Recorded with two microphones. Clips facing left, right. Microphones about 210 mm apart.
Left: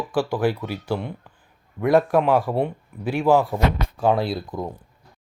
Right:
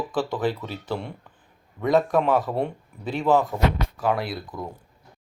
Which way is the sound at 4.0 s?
25° left (ahead or behind).